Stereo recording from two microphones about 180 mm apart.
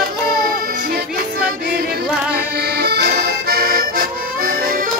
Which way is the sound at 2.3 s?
60° right (ahead or behind).